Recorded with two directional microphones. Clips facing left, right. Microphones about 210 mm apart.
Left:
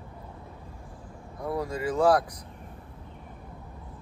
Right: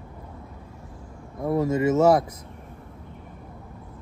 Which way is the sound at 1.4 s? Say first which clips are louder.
Right 8 dB; 25° right (ahead or behind).